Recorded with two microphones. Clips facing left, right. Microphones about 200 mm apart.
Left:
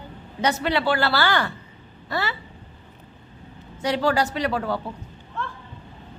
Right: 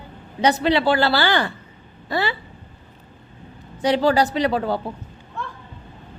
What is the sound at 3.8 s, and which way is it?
Speech, 30° right (ahead or behind).